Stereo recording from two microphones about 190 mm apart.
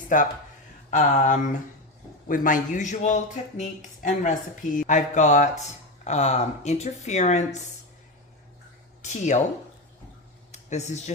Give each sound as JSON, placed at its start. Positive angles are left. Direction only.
{"t": 0.1, "sound": "a woman's voice", "side_deg": 45}
{"t": 9.0, "sound": "speech", "side_deg": 40}
{"t": 10.5, "sound": "speech", "side_deg": 35}